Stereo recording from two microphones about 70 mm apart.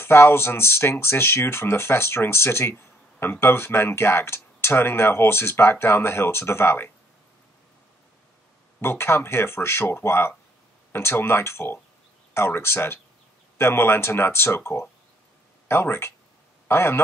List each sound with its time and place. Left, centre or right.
0.0 s speech: left
8.8 s a man's voice: left